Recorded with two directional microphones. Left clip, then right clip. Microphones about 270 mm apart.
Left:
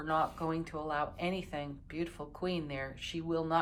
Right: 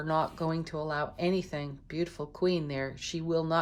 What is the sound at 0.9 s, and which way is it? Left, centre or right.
A woman's voice, centre.